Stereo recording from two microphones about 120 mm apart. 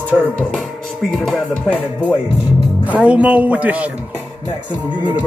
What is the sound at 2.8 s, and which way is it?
Speech, 10° right (ahead or behind).